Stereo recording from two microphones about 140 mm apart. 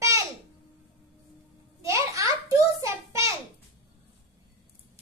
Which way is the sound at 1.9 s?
20° right (ahead or behind).